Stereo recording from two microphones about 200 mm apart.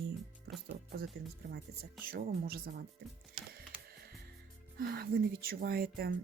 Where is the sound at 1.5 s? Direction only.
55° right (ahead or behind).